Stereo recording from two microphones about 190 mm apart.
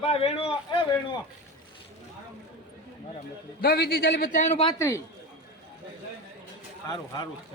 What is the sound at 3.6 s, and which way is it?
Speech, 55° left (ahead or behind).